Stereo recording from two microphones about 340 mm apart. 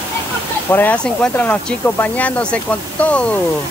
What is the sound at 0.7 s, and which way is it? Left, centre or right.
Speech, centre.